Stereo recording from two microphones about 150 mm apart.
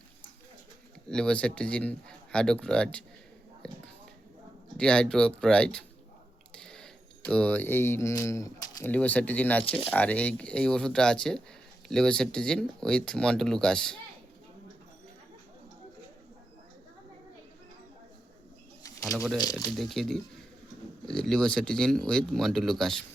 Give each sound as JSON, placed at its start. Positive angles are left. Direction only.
{"t": 1.0, "sound": "speech", "side_deg": 5}
{"t": 8.9, "sound": "speech", "side_deg": 10}
{"t": 18.8, "sound": "bird", "side_deg": 25}
{"t": 19.1, "sound": "speech", "side_deg": 0}